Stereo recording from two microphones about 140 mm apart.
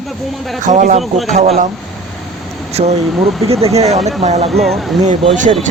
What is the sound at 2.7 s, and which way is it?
Speech, 50° right (ahead or behind).